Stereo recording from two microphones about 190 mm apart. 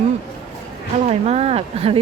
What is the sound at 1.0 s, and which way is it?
Speech, 35° right (ahead or behind).